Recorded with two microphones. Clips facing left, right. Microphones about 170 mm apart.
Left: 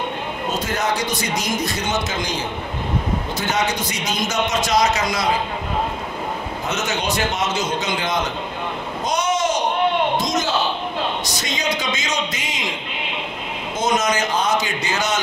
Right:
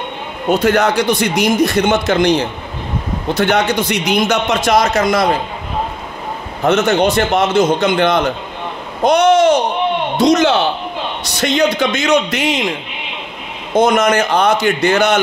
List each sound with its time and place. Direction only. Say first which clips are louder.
0.5 s a man's voice: right 11 dB; 70° right (ahead or behind)
6.6 s a man's voice: right 14 dB; 65° right (ahead or behind)
13.7 s a man's voice: right 8 dB; 60° right (ahead or behind)